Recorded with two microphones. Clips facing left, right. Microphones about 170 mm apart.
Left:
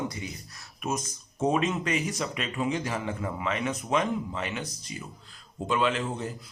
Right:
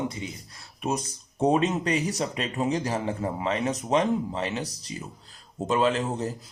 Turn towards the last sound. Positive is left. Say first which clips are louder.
# right 3 dB
turn(degrees=-40)  # may be behind; listen again after turning